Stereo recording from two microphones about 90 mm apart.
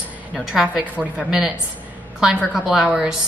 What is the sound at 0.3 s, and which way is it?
Speech, 5° right (ahead or behind).